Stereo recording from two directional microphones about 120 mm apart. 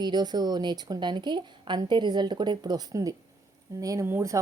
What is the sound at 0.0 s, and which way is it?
Speech, 35° right (ahead or behind).